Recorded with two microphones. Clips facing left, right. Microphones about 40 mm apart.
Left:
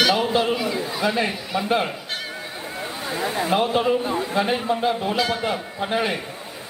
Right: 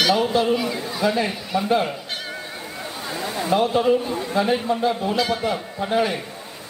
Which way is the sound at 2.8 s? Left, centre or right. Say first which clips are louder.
Left 3 dB; centre.